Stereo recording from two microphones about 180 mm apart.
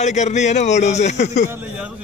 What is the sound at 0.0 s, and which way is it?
A man's voice, 40° left (ahead or behind).